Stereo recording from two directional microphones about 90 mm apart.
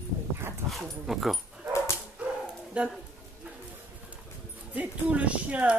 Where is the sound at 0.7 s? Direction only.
Centre (ahead or behind).